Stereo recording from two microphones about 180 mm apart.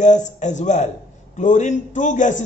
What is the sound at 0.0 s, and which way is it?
A man's voice, 40° left (ahead or behind).